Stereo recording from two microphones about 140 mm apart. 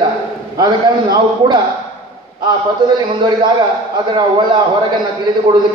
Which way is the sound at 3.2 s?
35° right (ahead or behind).